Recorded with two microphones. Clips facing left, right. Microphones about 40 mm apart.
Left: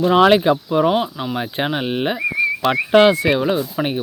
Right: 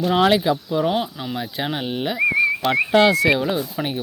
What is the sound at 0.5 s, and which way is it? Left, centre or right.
Speech, left.